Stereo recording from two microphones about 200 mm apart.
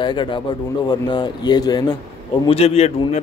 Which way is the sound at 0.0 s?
25° left (ahead or behind).